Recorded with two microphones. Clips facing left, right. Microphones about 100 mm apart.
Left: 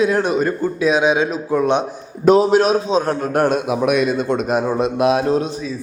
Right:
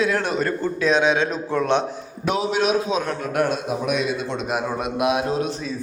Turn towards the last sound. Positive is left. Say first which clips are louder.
# left 5 dB
turn(degrees=35)  # may be behind; listen again after turning